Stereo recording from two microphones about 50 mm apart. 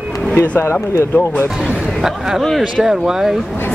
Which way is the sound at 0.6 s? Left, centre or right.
Left.